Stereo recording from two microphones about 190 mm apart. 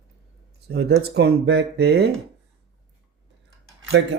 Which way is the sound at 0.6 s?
60° right (ahead or behind).